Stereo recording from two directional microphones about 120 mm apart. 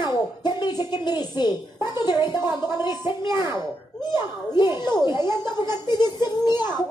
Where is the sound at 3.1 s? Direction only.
40° left (ahead or behind).